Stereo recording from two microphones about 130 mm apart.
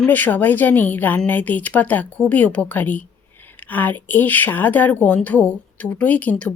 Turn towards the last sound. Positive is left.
turn(degrees=10)  # may be behind; listen again after turning